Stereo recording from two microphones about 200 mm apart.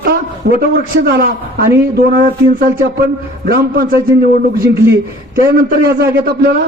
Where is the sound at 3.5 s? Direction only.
50° right (ahead or behind).